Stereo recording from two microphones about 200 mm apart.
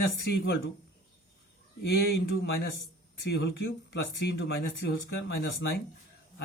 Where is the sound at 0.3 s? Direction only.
50° left (ahead or behind).